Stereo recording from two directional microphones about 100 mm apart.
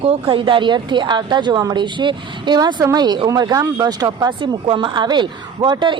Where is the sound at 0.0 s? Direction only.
60° right (ahead or behind); by 4.3 s 40° right (ahead or behind).